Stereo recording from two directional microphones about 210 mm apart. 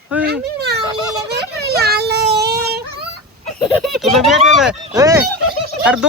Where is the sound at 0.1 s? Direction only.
5° right (ahead or behind).